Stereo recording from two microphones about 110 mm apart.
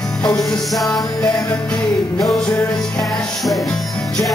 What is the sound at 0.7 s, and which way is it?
Music, centre (ahead or behind).